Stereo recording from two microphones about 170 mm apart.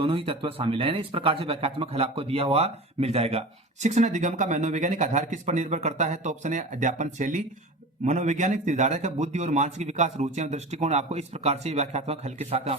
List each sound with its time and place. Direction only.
0.0 s speech: 30° right (ahead or behind)